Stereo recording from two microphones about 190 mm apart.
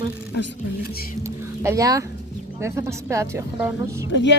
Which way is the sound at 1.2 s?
15° right (ahead or behind).